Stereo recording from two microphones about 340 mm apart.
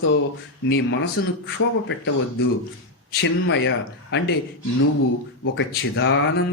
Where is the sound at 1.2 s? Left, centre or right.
Left.